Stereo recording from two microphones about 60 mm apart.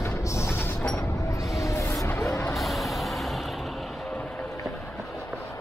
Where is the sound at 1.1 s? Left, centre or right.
Left.